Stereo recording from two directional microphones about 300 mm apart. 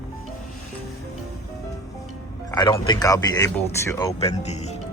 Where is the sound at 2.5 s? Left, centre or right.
Centre.